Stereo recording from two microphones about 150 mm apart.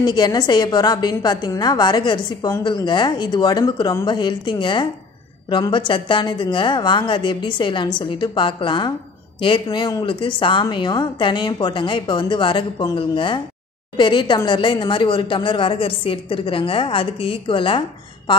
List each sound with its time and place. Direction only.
0.0 s a woman's voice: 30° left (ahead or behind)